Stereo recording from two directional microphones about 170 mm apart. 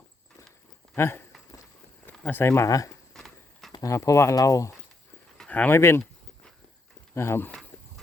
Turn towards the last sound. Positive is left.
turn(degrees=15)  # may be behind; listen again after turning